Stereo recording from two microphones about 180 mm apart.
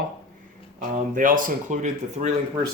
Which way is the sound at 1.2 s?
50° right (ahead or behind).